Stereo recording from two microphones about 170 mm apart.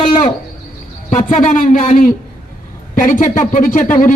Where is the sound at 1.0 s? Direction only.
50° left (ahead or behind).